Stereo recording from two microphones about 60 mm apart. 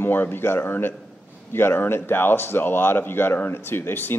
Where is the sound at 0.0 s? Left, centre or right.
Left.